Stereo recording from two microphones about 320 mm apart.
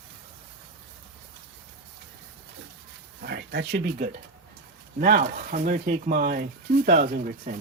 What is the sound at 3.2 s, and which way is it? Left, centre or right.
Speech, right.